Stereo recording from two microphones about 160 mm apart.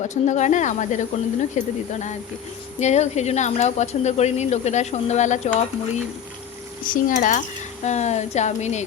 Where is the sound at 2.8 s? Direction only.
45° left (ahead or behind).